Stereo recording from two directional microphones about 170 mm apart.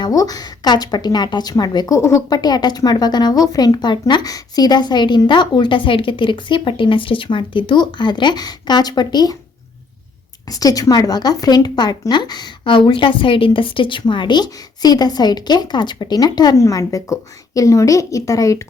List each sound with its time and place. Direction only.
0.0 s a woman's voice: 20° left (ahead or behind)
10.5 s a woman's voice: 20° left (ahead or behind)